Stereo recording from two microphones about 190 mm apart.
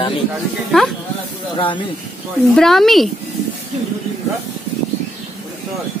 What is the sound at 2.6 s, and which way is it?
Speech, centre (ahead or behind).